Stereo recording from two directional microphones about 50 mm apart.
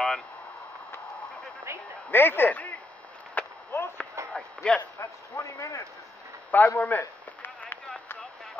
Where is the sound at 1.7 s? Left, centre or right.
Right.